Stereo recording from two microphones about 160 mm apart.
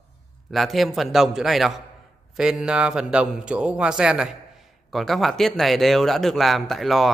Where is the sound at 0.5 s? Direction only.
Centre (ahead or behind).